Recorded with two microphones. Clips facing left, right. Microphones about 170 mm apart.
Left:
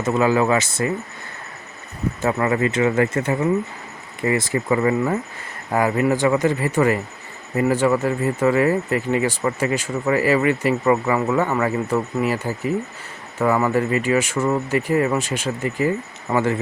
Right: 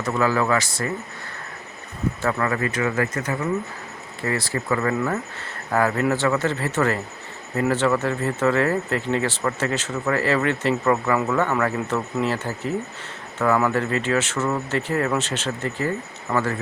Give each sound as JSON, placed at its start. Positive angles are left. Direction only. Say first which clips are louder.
{"t": 0.0, "sound": "speech", "louder": "left 4 dB", "side_deg": 20}
{"t": 2.2, "sound": "speech", "louder": "left 5 dB", "side_deg": 20}